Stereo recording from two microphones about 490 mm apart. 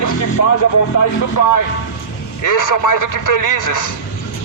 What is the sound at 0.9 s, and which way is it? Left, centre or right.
Speech, left.